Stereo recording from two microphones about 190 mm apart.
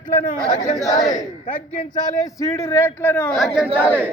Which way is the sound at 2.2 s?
15° left (ahead or behind).